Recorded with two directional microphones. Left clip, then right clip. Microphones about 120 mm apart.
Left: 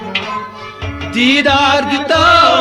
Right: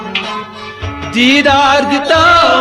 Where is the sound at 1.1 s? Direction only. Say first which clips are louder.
Right 2 dB; 30° right (ahead or behind).